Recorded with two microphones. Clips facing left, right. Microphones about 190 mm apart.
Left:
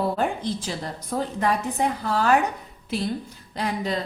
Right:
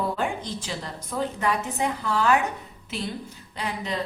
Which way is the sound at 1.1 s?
45° left (ahead or behind).